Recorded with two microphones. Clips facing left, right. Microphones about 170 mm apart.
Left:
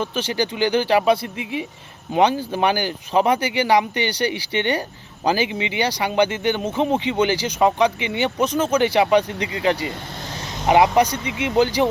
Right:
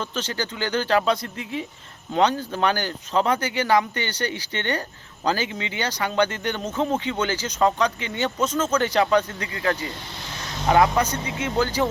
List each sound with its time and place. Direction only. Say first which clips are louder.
0.0 s speech: left 5 dB; 10° left (ahead or behind)